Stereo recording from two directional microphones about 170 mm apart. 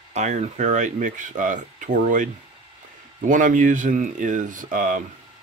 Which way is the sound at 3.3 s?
50° right (ahead or behind).